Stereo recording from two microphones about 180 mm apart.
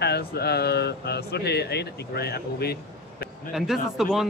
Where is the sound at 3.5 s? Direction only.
Centre (ahead or behind).